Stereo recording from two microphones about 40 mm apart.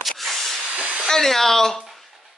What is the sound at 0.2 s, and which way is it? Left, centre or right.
Hiss, centre.